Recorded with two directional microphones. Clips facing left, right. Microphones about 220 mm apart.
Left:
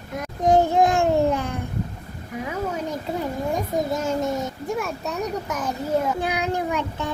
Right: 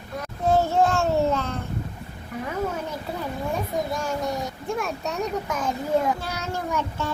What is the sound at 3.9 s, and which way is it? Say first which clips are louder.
Speech: left 3 dB; 20° left (ahead or behind).